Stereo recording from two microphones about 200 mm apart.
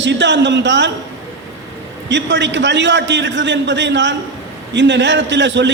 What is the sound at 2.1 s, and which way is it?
A man's voice, 65° right (ahead or behind).